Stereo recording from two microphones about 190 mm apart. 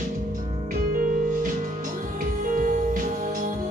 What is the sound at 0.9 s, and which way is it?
Music, 45° right (ahead or behind).